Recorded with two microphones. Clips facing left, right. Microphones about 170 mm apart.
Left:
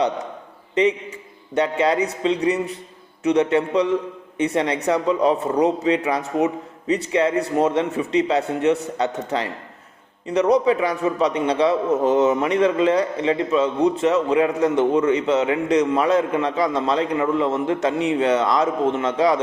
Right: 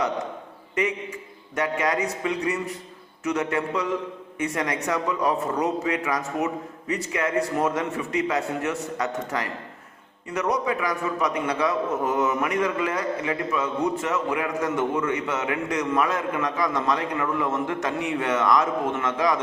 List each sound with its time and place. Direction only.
1.5 s a man's voice: 25° left (ahead or behind)